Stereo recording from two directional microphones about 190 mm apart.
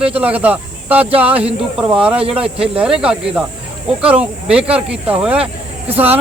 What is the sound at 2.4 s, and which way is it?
Speech, 30° right (ahead or behind).